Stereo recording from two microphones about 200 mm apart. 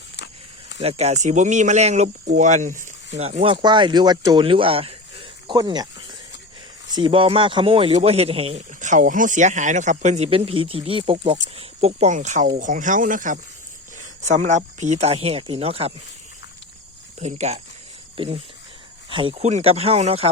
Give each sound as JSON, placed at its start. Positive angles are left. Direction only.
{"t": 0.8, "sound": "speech", "side_deg": -30}
{"t": 6.9, "sound": "speech", "side_deg": -25}
{"t": 17.2, "sound": "speech", "side_deg": -35}